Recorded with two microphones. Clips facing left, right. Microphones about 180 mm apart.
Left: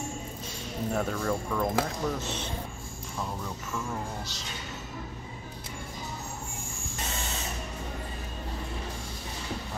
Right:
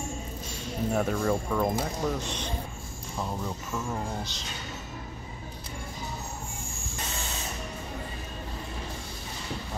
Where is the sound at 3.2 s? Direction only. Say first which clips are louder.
Right 3 dB; 15° right (ahead or behind).